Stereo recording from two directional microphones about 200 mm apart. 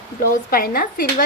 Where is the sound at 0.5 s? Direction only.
45° left (ahead or behind).